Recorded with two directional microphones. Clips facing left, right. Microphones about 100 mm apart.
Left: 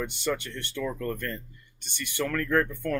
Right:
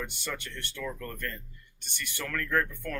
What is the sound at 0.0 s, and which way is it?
Speech, 20° left (ahead or behind).